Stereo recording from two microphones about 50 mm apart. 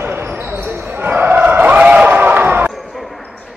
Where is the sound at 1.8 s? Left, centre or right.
Right.